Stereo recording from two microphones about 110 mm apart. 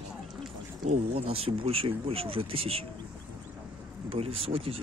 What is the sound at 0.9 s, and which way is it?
Speech, 65° right (ahead or behind).